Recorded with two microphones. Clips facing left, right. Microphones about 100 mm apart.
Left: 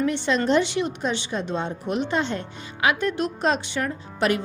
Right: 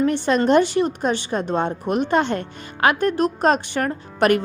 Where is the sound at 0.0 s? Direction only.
45° right (ahead or behind).